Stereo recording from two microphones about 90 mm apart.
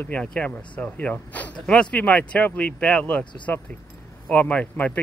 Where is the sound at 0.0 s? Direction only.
15° left (ahead or behind).